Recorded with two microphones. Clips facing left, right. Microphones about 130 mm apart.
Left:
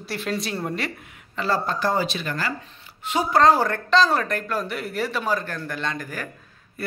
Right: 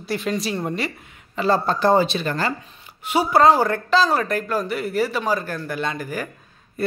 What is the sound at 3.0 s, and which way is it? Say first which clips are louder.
Speech: right 2 dB; 10° right (ahead or behind).